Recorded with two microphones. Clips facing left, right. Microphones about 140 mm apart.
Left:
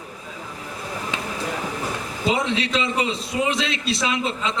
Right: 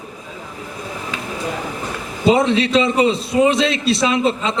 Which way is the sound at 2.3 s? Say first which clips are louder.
Right 8 dB; 35° right (ahead or behind).